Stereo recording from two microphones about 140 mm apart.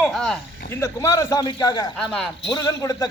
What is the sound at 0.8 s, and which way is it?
A man's voice, 20° left (ahead or behind).